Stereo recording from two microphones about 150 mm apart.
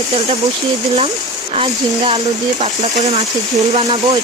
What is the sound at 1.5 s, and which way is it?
Speech, 40° right (ahead or behind).